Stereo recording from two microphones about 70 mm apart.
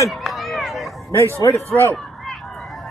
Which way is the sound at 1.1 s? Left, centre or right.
Left.